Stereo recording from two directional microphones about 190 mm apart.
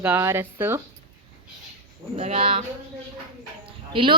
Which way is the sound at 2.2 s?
35° right (ahead or behind).